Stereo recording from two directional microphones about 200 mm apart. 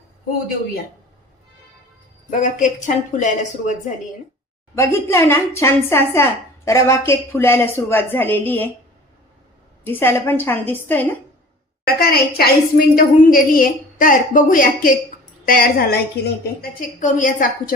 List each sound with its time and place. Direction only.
2.3 s a woman's voice: 40° left (ahead or behind)
4.7 s a woman's voice: 15° left (ahead or behind)
9.8 s a woman's voice: 10° left (ahead or behind)
11.9 s a woman's voice: 50° left (ahead or behind)